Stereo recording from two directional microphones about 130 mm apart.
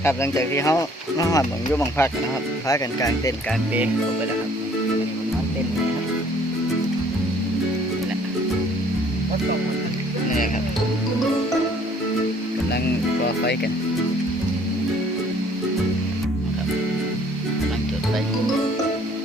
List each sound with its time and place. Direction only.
0.0 s speech: 20° left (ahead or behind)